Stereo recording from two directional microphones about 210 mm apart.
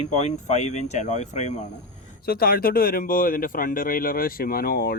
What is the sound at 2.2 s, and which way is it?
Speech, 45° left (ahead or behind).